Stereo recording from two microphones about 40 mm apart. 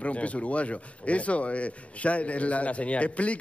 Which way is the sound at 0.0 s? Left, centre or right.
Left.